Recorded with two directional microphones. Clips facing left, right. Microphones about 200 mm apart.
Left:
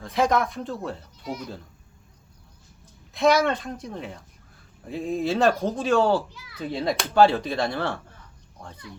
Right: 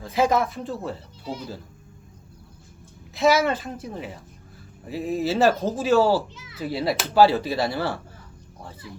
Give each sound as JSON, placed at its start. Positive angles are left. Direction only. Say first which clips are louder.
{"t": 0.0, "sound": "speech", "louder": "right 1 dB", "side_deg": -5}
{"t": 1.2, "sound": "speech", "louder": "even", "side_deg": -30}
{"t": 3.2, "sound": "speech", "louder": "even", "side_deg": -5}
{"t": 6.3, "sound": "children playing", "louder": "right 2 dB", "side_deg": -20}
{"t": 6.6, "sound": "speech", "louder": "right 1 dB", "side_deg": -5}